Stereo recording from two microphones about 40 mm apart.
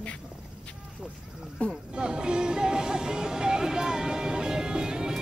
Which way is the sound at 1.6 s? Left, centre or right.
Left.